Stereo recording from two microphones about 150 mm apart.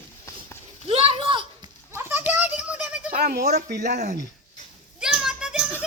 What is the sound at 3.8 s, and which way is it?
Speech, 50° right (ahead or behind).